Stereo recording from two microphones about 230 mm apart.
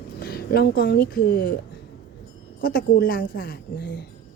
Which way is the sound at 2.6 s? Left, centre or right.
Left.